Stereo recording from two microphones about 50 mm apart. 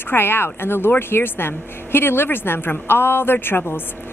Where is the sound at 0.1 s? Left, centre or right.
Left.